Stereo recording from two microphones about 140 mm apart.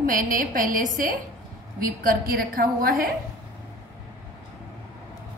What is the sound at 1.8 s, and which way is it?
A woman's voice, 90° right.